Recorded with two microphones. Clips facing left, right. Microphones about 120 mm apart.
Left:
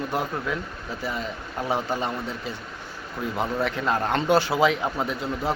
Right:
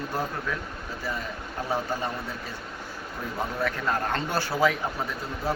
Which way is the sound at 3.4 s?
20° left (ahead or behind).